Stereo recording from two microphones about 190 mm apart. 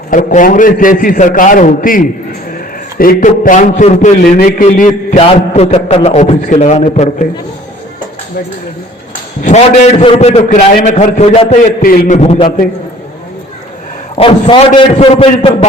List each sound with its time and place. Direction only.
0.1 s a man's voice: 40° left (ahead or behind)
9.4 s a man's voice: 40° left (ahead or behind)
14.2 s a man's voice: 30° left (ahead or behind)